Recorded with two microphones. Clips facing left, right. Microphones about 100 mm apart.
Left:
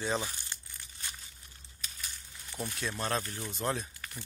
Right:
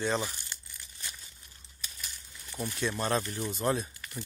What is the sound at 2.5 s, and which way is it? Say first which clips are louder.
Speech: right 4 dB; centre (ahead or behind).